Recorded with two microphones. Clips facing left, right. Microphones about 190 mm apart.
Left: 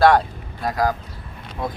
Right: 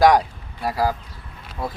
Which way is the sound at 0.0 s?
15° right (ahead or behind).